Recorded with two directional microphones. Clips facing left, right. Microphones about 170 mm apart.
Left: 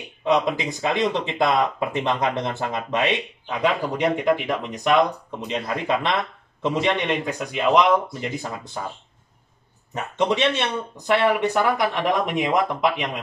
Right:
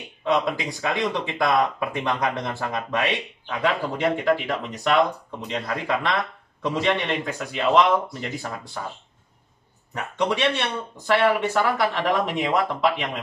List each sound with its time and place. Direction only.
0.2 s speech: 20° left (ahead or behind)
9.9 s speech: 20° left (ahead or behind)